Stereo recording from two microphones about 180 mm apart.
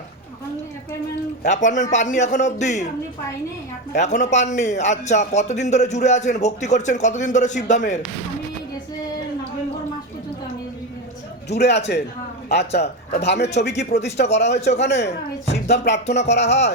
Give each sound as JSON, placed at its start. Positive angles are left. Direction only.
{"t": 1.5, "sound": "a man's voice", "side_deg": 40}
{"t": 3.9, "sound": "a man's voice", "side_deg": 40}
{"t": 11.4, "sound": "speech", "side_deg": 70}
{"t": 12.8, "sound": "a man's voice", "side_deg": 35}
{"t": 13.2, "sound": "speech", "side_deg": 70}